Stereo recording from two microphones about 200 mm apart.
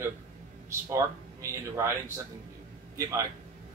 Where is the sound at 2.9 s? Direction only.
15° right (ahead or behind).